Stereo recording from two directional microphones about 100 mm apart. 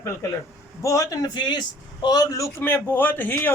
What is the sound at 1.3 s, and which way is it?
A man's voice, 50° left (ahead or behind).